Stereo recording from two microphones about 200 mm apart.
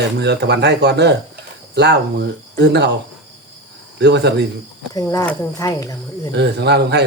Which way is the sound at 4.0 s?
60° right (ahead or behind).